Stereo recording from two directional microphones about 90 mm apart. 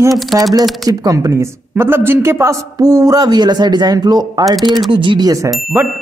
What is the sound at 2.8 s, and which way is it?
Speech, 40° right (ahead or behind).